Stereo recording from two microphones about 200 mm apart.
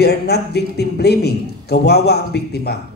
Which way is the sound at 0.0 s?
55° left (ahead or behind).